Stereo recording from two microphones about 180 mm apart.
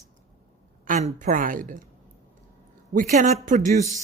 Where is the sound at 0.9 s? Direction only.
40° right (ahead or behind).